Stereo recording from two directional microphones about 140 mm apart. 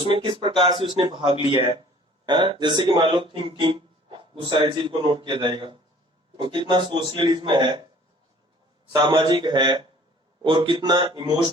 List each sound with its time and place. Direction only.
0.0 s speech: 40° right (ahead or behind)
8.9 s speech: 30° right (ahead or behind)